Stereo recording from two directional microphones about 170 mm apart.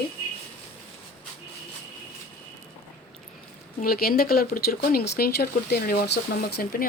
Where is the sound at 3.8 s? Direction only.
60° left (ahead or behind).